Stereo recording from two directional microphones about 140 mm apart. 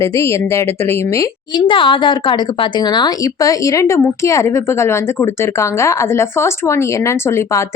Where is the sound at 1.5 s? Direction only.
35° left (ahead or behind).